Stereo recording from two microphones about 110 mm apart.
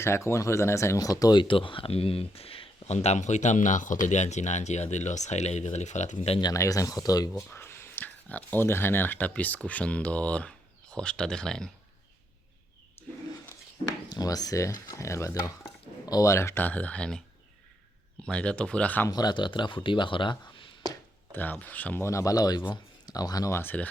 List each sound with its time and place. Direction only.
0.0 s speech: 25° left (ahead or behind); by 6.4 s 80° left
6.4 s speech: 30° left (ahead or behind)
7.5 s speech: 20° left (ahead or behind); by 11.7 s 5° left (ahead or behind)
14.1 s speech: 35° left (ahead or behind); by 17.2 s 5° left (ahead or behind)
18.3 s speech: 10° left (ahead or behind)
19.0 s speech: 40° left (ahead or behind)
21.3 s speech: 15° left (ahead or behind); by 23.5 s 35° left (ahead or behind)
23.5 s speech: 20° left (ahead or behind)